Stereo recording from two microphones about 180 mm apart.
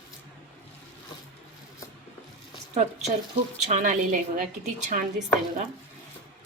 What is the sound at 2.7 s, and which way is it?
A woman's voice, 40° right (ahead or behind).